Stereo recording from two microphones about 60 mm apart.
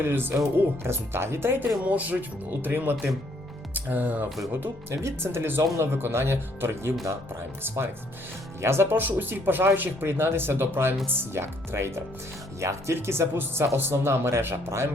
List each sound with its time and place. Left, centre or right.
0.0 s speech: right
1.8 s speech: right
4.6 s speech: right
8.6 s speech: right